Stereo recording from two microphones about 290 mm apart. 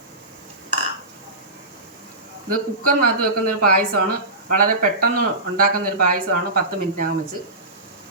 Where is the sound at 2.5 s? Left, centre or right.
Right.